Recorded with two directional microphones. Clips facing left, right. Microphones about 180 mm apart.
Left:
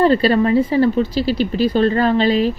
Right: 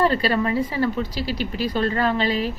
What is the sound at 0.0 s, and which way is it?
Speech, 30° left (ahead or behind).